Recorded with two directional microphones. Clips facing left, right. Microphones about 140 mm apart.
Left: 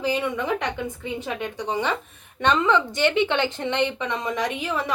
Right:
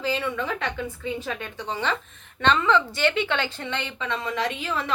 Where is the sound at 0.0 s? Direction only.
15° left (ahead or behind).